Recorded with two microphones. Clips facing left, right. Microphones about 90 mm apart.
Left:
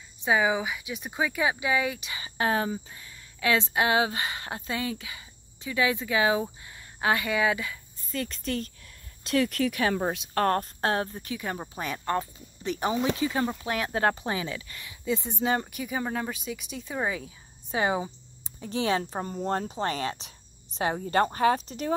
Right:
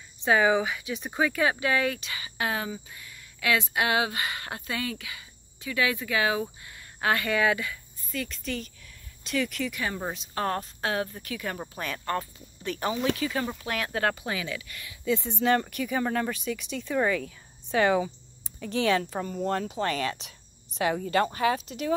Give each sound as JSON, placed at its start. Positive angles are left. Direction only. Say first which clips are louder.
{"t": 0.2, "sound": "speech", "louder": "right 2 dB", "side_deg": 10}
{"t": 2.2, "sound": "a woman's voice", "louder": "left 4 dB", "side_deg": 30}
{"t": 9.8, "sound": "speech", "louder": "left 6 dB", "side_deg": 70}
{"t": 10.1, "sound": "speech", "louder": "left 4 dB", "side_deg": 55}
{"t": 11.1, "sound": "a woman's voice", "louder": "left 1 dB", "side_deg": 20}